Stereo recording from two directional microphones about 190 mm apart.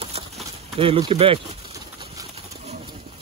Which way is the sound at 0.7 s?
30° right (ahead or behind).